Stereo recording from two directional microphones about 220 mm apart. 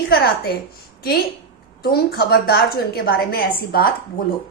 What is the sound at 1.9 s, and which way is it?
A woman's voice, 45° left (ahead or behind).